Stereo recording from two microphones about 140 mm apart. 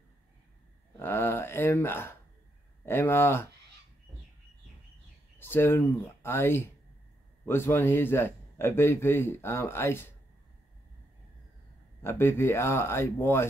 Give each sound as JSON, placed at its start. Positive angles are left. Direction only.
{"t": 0.9, "sound": "a sound", "side_deg": 15}
{"t": 2.8, "sound": "a man's voice", "side_deg": 15}
{"t": 5.4, "sound": "a man's voice", "side_deg": 15}
{"t": 12.0, "sound": "a man's voice", "side_deg": 15}